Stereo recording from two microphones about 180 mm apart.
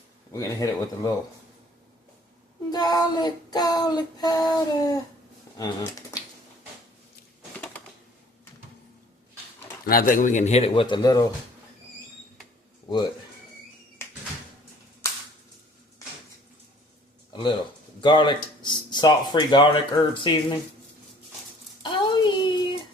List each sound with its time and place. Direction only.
0.3 s speech: 20° left (ahead or behind)
2.6 s child singing: 20° left (ahead or behind)
5.5 s speech: 20° left (ahead or behind)
9.8 s a man's voice: 55° left (ahead or behind); by 11.2 s 25° left (ahead or behind)
12.9 s speech: 25° left (ahead or behind)
18.0 s speech: 25° left (ahead or behind)
21.8 s a sound: 25° left (ahead or behind)